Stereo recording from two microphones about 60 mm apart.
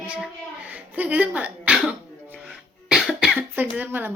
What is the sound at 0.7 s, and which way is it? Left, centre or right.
Speech, right.